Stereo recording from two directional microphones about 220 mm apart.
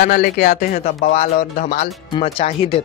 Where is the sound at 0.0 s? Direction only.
45° left (ahead or behind).